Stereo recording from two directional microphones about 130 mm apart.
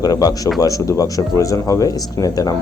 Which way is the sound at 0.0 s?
30° left (ahead or behind).